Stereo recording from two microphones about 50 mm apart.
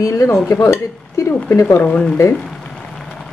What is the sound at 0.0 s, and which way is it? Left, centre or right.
Speech, left.